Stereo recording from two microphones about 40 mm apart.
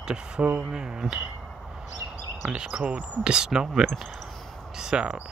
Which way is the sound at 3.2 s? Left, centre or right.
Centre.